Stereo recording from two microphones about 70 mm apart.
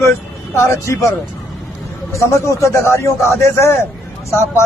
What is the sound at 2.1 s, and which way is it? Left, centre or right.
A man's voice, left.